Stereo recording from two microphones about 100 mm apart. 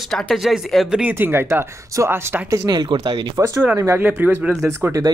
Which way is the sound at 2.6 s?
45° right (ahead or behind).